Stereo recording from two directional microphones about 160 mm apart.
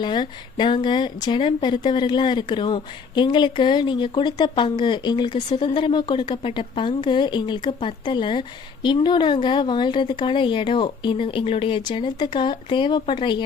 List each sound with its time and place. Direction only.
0.0 s a woman's voice: 30° left (ahead or behind)